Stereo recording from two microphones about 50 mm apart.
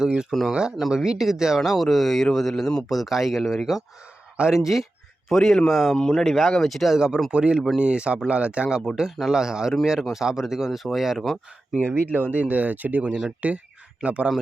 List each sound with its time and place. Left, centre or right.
0.0 s speech: centre
5.3 s speech: centre
6.9 s speech: centre
9.0 s speech: centre
11.8 s speech: right